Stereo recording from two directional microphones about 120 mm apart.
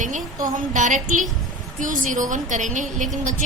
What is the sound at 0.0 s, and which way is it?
A woman's voice, 90° right.